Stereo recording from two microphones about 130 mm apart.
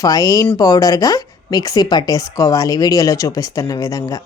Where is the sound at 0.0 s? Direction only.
30° left (ahead or behind).